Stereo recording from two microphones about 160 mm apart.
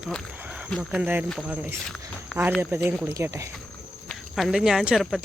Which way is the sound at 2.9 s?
15° right (ahead or behind).